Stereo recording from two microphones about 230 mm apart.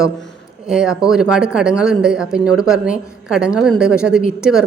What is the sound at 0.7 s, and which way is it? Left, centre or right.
Speech, centre.